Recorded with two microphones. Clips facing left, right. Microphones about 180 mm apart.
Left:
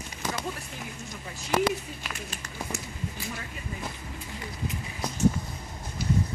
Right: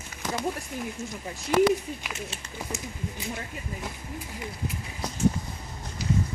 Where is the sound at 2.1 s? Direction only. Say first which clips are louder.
Right 1 dB; 20° right (ahead or behind).